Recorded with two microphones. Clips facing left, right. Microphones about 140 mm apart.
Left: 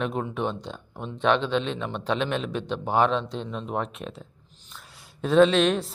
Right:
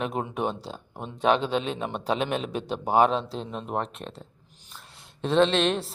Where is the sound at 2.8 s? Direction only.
10° right (ahead or behind).